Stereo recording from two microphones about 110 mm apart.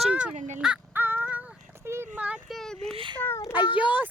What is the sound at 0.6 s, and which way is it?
Speech, 5° right (ahead or behind).